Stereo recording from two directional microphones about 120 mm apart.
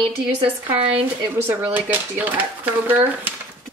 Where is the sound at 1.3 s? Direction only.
15° right (ahead or behind).